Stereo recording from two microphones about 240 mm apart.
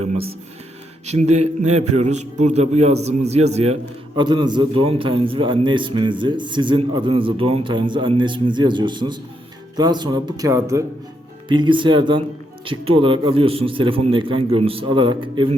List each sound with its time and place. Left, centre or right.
0.0 s a man's voice: right